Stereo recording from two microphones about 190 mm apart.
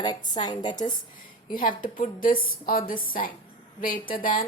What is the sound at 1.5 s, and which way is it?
Speech, 45° left (ahead or behind).